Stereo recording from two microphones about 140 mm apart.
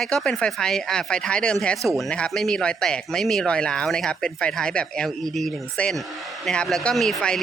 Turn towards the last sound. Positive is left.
turn(degrees=5)  # may be behind; listen again after turning